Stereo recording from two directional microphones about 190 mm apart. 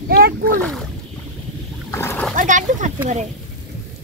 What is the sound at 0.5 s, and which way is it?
Speech, 5° left (ahead or behind).